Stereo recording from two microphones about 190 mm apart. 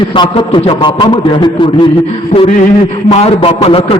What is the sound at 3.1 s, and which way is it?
Speech, 35° left (ahead or behind).